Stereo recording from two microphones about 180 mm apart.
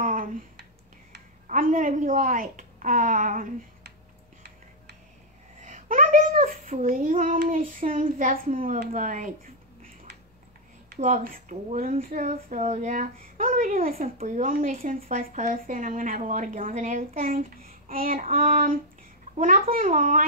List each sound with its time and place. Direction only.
0.0 s a sound: 50° right (ahead or behind)
1.5 s a woman's voice: 50° right (ahead or behind)
5.7 s a child's voice: 50° right (ahead or behind)
11.0 s a child's voice: 45° right (ahead or behind)
14.0 s a child's voice: 40° right (ahead or behind)
17.6 s child singing: 50° right (ahead or behind)
18.4 s a child's voice: 45° right (ahead or behind)